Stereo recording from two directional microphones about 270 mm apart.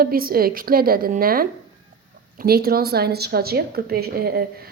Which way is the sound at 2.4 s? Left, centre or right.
Right.